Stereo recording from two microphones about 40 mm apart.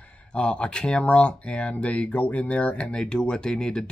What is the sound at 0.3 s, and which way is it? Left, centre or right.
Speech, left.